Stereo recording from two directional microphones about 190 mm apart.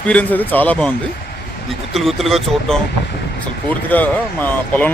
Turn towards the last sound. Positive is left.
turn(degrees=10)  # may be behind; listen again after turning